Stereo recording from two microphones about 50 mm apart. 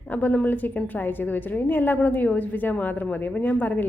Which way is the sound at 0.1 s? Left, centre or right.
Left.